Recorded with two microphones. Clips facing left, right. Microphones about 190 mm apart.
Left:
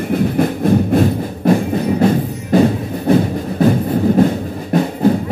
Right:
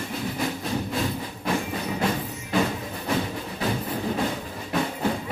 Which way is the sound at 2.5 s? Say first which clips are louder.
Left 12 dB; 40° left (ahead or behind).